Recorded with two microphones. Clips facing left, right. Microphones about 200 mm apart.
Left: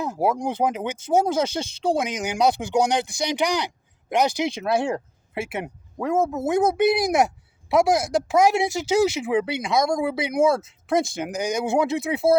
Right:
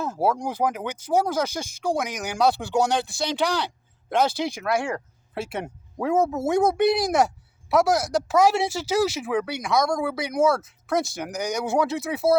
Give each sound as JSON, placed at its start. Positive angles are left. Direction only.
{"t": 0.0, "sound": "speech", "side_deg": 15}
{"t": 5.5, "sound": "speech", "side_deg": 0}
{"t": 7.2, "sound": "speech", "side_deg": 20}